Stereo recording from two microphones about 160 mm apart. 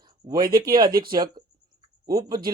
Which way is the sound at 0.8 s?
20° right (ahead or behind).